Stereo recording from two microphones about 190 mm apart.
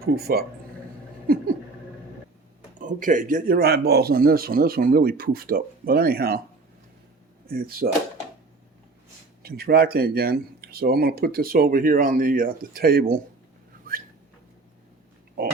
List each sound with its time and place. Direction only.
0.0 s a man's voice: 55° right (ahead or behind)
2.7 s speech: 45° right (ahead or behind)
7.4 s speech: 50° right (ahead or behind)
9.4 s speech: 55° right (ahead or behind)